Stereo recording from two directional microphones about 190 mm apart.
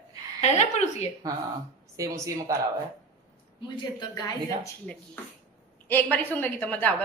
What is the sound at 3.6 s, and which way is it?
Speech, 20° left (ahead or behind).